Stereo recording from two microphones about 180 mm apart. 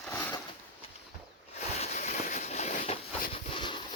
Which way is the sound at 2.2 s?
35° left (ahead or behind).